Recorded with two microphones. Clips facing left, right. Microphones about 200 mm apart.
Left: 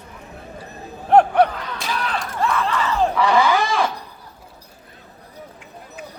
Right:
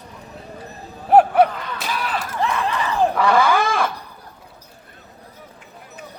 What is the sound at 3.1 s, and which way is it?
Wild animals, 55° right (ahead or behind).